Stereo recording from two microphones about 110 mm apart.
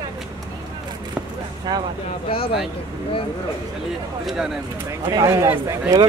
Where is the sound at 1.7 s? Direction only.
35° right (ahead or behind).